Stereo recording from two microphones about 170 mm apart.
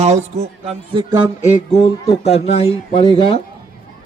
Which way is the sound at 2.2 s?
35° left (ahead or behind).